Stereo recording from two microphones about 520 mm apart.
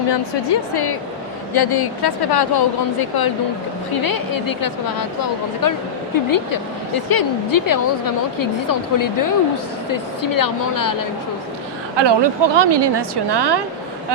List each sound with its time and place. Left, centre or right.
0.1 s speech: left
11.9 s a woman's voice: right